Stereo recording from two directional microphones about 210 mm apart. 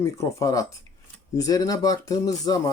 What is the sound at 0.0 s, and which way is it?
Speech, 15° left (ahead or behind).